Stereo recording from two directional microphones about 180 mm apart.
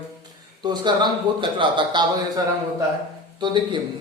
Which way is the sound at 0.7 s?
25° right (ahead or behind).